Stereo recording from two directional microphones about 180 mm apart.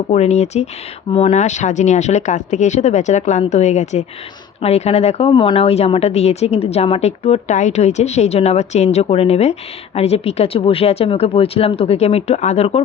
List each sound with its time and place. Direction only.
0.1 s a woman's voice: 40° left (ahead or behind)